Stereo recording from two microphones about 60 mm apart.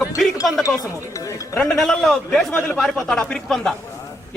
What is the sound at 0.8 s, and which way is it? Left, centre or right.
Speech, left.